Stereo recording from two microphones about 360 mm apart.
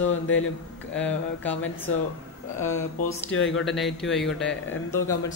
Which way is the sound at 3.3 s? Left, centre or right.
Left.